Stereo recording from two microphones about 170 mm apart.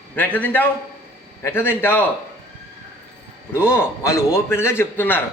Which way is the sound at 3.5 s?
15° left (ahead or behind).